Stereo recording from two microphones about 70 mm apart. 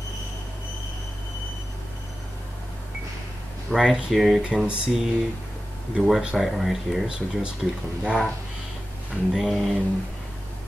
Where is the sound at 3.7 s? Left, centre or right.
Centre.